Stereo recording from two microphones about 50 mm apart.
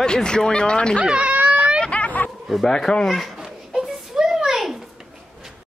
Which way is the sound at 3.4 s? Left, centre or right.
Centre.